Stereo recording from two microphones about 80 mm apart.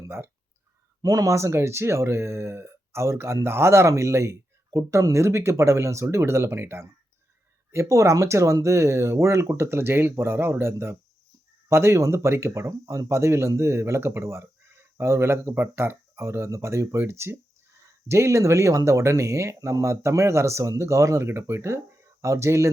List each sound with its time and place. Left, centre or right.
1.0 s speech: right